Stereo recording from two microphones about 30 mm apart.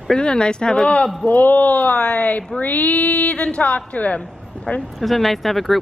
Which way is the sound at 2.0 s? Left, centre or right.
Left.